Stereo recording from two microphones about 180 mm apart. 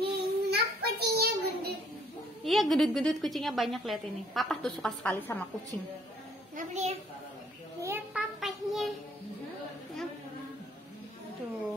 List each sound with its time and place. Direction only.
0.0 s child singing: 65° right (ahead or behind)
2.4 s a woman's voice: centre (ahead or behind)
6.5 s a child's voice: 40° right (ahead or behind)
7.8 s child singing: 10° right (ahead or behind)